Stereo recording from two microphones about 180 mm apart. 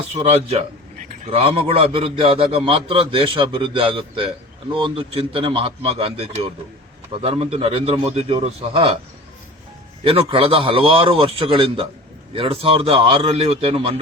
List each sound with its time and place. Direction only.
0.1 s a man's voice: 35° right (ahead or behind)
10.0 s a man's voice: 30° right (ahead or behind)